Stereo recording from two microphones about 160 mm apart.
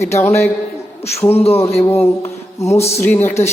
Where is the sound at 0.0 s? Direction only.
15° left (ahead or behind).